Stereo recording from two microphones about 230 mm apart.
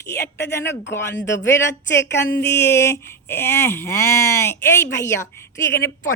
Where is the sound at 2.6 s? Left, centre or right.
Centre.